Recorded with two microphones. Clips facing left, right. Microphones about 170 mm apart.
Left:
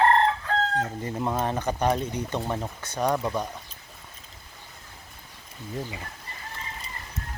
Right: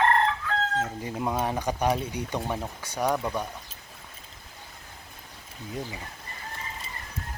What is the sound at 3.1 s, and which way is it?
Speech, 10° left (ahead or behind).